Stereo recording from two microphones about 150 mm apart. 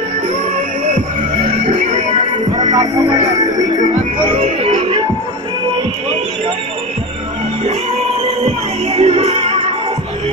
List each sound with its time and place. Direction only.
1.7 s music: 40° right (ahead or behind)
2.5 s music: 25° right (ahead or behind)
4.4 s music: 45° right (ahead or behind)
8.9 s music: 45° right (ahead or behind)